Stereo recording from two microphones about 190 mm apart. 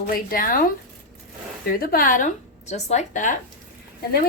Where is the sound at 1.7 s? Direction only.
50° left (ahead or behind).